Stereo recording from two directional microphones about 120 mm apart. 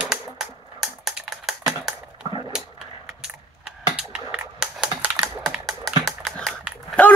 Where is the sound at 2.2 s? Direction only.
40° right (ahead or behind).